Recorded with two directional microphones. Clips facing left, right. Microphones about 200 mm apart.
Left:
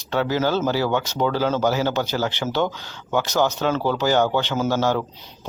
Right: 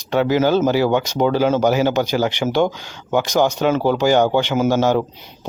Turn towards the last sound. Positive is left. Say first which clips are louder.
# right 5 dB
turn(degrees=-15)  # may be behind; listen again after turning